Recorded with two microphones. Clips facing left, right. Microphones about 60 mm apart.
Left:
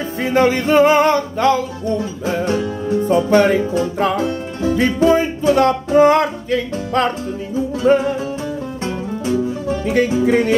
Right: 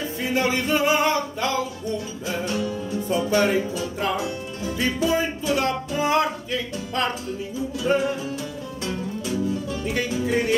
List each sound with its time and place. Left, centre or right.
0.2 s music: left
7.8 s music: left
8.8 s music: left
10.2 s music: left